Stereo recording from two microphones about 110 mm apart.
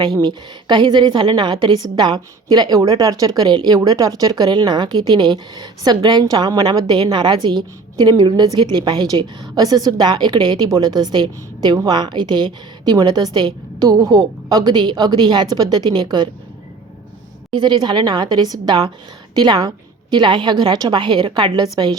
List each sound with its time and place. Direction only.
0.0 s a woman's voice: 40° right (ahead or behind)
17.5 s a woman's voice: 45° right (ahead or behind)